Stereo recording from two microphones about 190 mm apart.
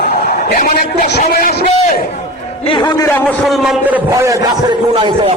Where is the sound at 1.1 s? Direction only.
55° left (ahead or behind).